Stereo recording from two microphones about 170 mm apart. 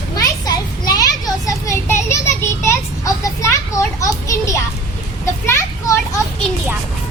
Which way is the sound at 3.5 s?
20° left (ahead or behind).